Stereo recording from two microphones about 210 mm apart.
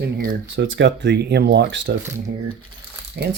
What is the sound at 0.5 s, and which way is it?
Speech, 60° right (ahead or behind).